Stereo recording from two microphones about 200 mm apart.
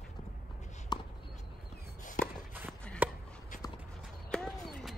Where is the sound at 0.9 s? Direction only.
20° left (ahead or behind).